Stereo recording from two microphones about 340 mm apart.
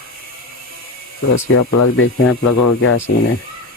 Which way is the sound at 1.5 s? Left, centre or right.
Left.